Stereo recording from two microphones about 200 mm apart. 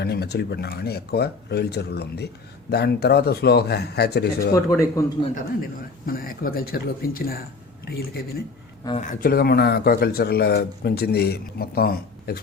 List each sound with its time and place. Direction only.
0.0 s speech: 55° left (ahead or behind)
4.5 s a man's voice: 15° left (ahead or behind)
6.1 s speech: 45° left (ahead or behind)